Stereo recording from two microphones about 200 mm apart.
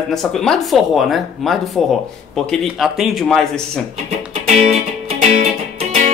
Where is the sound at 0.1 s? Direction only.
Centre (ahead or behind).